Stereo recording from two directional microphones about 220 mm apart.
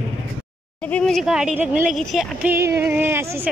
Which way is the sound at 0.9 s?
Centre (ahead or behind).